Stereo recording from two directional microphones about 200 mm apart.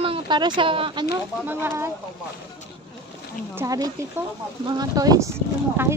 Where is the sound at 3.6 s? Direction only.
20° right (ahead or behind).